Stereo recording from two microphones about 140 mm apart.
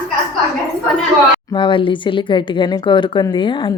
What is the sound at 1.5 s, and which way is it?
A woman's voice, 35° left (ahead or behind).